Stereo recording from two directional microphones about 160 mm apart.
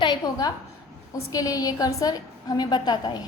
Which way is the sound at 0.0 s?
25° left (ahead or behind).